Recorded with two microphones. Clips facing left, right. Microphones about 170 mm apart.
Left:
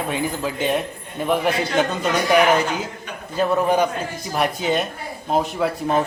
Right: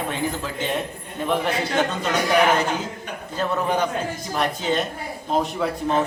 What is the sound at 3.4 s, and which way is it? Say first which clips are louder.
A man's voice: left 5 dB; 10° left (ahead or behind).